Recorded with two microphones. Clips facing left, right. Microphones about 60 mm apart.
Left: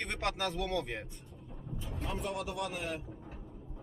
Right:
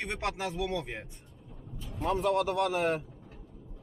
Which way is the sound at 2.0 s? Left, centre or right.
Right.